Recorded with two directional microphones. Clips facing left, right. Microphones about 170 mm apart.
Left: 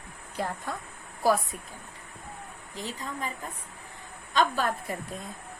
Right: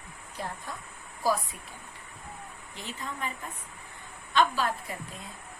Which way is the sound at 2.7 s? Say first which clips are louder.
Left 3 dB; 35° left (ahead or behind).